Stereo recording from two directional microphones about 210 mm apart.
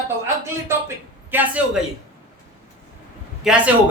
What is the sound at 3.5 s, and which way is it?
Speech, centre (ahead or behind).